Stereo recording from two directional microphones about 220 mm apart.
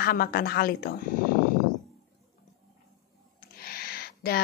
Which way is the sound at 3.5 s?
45° left (ahead or behind).